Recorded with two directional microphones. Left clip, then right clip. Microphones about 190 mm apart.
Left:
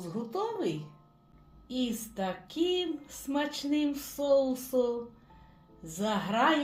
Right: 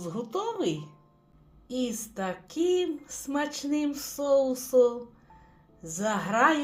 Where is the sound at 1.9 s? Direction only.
20° right (ahead or behind).